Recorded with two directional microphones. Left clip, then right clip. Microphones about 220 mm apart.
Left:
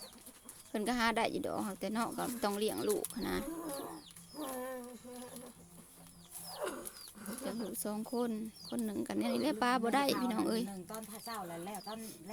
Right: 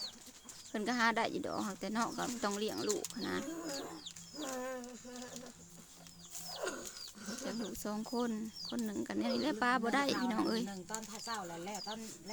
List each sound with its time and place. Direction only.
0.7 s speech: 5° left (ahead or behind)
4.4 s a sound: 5° right (ahead or behind)
6.6 s bird: 5° right (ahead or behind)
8.7 s speech: centre (ahead or behind)